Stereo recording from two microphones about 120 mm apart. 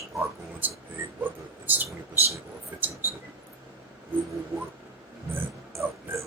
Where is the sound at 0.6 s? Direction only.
15° right (ahead or behind).